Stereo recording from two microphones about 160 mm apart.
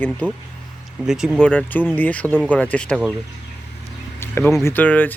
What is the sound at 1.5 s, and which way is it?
Speech, 10° left (ahead or behind).